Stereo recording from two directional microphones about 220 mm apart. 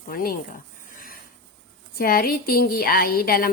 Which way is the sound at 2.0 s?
40° left (ahead or behind).